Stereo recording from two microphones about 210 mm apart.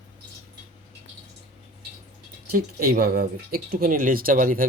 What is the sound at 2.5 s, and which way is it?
Speech, 45° right (ahead or behind).